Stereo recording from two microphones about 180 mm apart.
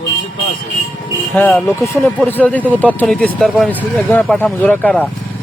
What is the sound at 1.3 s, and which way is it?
Speech, 10° left (ahead or behind).